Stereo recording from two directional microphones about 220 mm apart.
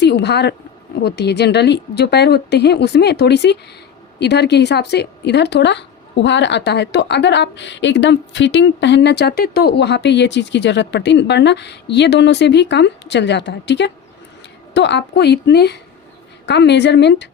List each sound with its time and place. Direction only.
0.0 s speech: 50° left (ahead or behind)